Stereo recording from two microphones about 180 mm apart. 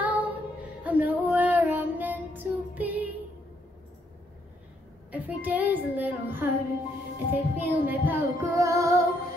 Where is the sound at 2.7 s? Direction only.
10° right (ahead or behind).